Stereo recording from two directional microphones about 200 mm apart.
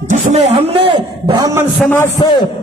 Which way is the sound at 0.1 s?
35° right (ahead or behind).